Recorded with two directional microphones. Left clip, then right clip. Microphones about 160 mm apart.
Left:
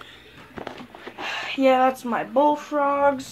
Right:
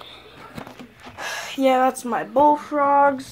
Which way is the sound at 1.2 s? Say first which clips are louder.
Even; centre (ahead or behind).